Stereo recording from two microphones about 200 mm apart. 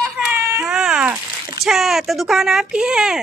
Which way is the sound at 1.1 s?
15° right (ahead or behind).